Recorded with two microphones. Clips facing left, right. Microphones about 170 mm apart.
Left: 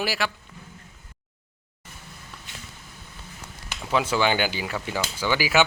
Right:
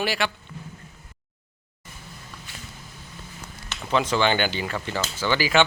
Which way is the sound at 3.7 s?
5° left (ahead or behind).